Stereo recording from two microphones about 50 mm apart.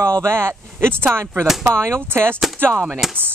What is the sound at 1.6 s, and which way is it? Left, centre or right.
Speech, right.